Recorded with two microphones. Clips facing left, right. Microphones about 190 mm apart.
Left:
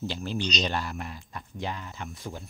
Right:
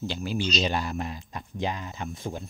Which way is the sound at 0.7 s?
20° right (ahead or behind).